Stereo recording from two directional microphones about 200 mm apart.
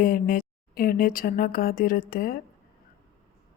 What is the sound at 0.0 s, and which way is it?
Speech, 45° left (ahead or behind).